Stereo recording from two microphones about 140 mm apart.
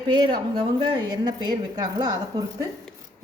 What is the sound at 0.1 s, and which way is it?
A woman's voice, 35° right (ahead or behind).